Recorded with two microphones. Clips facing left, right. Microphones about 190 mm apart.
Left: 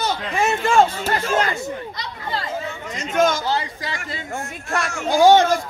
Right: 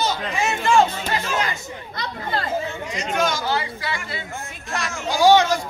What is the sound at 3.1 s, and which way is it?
Speech, 50° left (ahead or behind).